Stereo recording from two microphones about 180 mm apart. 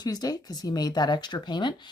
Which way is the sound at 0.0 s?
20° left (ahead or behind).